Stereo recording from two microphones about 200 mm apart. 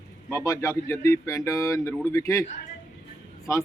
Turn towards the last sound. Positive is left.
turn(degrees=15)  # may be behind; listen again after turning